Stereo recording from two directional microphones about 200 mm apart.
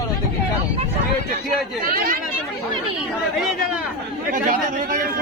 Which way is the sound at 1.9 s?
45° right (ahead or behind).